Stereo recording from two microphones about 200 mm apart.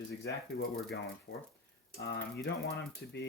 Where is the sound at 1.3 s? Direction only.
60° left (ahead or behind).